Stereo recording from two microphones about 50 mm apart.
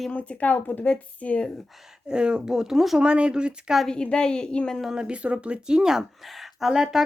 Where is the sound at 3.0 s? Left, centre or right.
Right.